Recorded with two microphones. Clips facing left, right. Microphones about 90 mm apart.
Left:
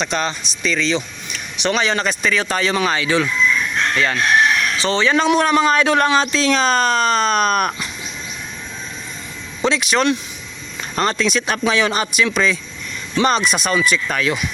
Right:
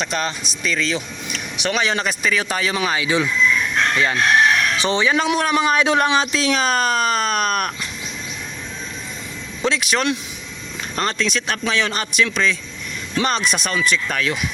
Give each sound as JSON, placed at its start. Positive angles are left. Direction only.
{"t": 0.0, "sound": "speech", "side_deg": -5}
{"t": 9.6, "sound": "speech", "side_deg": 0}